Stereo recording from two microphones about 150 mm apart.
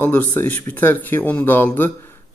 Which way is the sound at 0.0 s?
10° left (ahead or behind).